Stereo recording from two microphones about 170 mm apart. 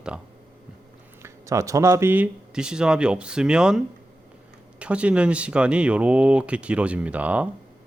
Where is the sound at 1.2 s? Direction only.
20° right (ahead or behind).